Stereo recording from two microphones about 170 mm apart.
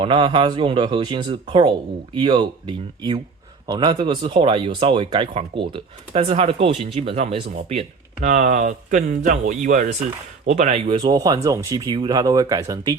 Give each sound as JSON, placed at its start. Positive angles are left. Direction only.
{"t": 0.0, "sound": "speech", "side_deg": -30}
{"t": 10.8, "sound": "speech", "side_deg": -30}